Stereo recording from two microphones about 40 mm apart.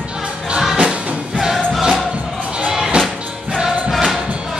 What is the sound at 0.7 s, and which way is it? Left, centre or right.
Music, right.